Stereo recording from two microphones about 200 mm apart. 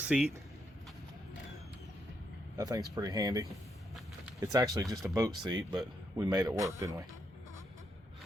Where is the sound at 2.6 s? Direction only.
20° right (ahead or behind).